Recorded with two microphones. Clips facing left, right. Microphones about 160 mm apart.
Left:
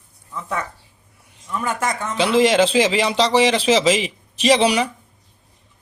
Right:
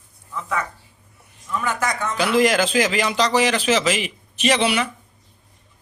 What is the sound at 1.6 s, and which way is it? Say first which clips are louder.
A man's voice: left 1 dB; 30° left (ahead or behind).